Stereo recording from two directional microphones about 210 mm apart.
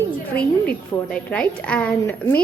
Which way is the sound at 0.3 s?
5° left (ahead or behind).